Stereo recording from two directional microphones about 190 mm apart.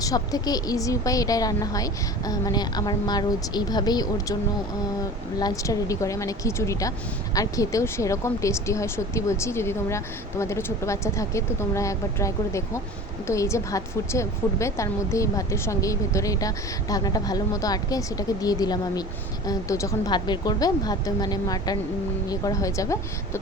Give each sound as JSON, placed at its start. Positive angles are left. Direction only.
{"t": 0.0, "sound": "a woman's voice", "side_deg": 20}
{"t": 5.4, "sound": "a woman's voice", "side_deg": 20}